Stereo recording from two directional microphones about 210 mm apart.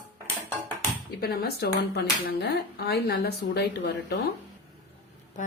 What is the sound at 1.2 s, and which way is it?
A woman's voice, 45° left (ahead or behind).